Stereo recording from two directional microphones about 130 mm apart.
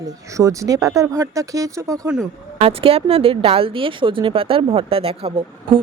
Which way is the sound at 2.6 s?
45° right (ahead or behind).